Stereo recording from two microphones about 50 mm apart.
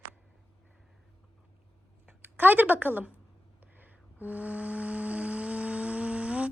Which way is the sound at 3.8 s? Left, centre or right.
Right.